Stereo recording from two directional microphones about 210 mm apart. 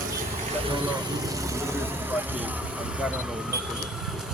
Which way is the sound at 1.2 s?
15° right (ahead or behind).